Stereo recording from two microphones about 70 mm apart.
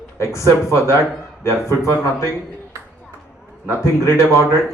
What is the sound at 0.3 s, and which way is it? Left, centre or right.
A man's voice, left.